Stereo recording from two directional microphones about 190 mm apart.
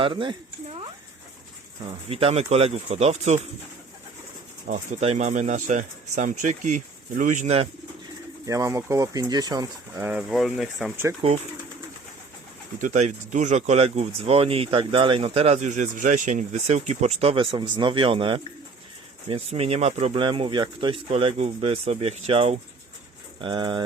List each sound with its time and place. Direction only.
0.0 s speech: 25° right (ahead or behind)
2.0 s speech: 30° right (ahead or behind)
4.7 s speech: 40° right (ahead or behind)
8.4 s speech: 15° right (ahead or behind)
10.1 s speech: 5° right (ahead or behind)
12.8 s speech: 40° right (ahead or behind)